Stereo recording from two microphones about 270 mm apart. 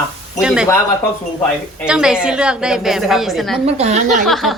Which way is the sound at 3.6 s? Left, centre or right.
Right.